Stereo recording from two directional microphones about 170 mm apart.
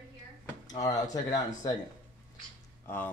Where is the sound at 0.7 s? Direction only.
20° left (ahead or behind).